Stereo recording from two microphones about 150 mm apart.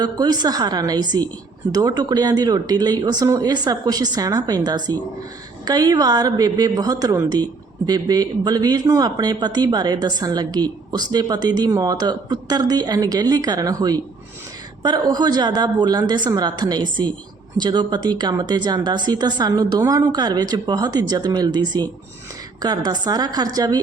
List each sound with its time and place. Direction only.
0.0 s a woman's voice: 25° right (ahead or behind)